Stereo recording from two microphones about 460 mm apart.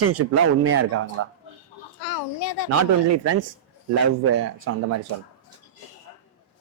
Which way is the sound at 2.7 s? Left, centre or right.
Right.